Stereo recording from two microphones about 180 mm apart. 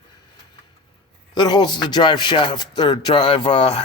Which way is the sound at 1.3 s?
25° left (ahead or behind).